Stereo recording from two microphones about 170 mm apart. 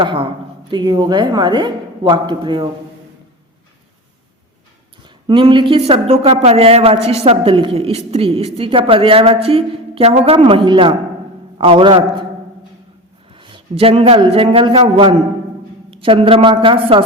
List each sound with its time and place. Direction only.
0.0 s a woman's voice: 30° right (ahead or behind)
5.3 s a woman's voice: 30° right (ahead or behind)
13.3 s a man's voice: 30° right (ahead or behind)